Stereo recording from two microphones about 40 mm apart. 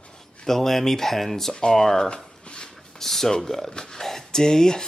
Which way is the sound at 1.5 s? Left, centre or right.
Left.